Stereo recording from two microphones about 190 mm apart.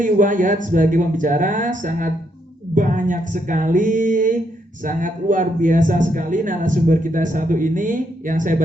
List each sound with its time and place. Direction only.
0.0 s speech: 45° right (ahead or behind)